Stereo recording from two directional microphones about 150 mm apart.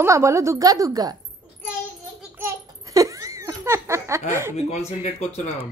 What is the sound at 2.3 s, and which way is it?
Laughter, 20° right (ahead or behind).